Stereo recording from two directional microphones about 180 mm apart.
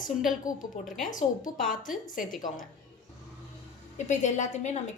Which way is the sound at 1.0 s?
50° left (ahead or behind).